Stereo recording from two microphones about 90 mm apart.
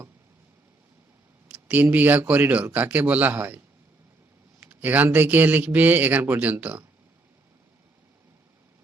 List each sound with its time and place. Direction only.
1.6 s speech: 20° right (ahead or behind)
4.7 s speech: 20° right (ahead or behind)